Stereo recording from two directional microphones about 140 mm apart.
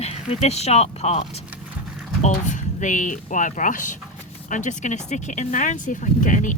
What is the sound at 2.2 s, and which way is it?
Speech, 60° left (ahead or behind).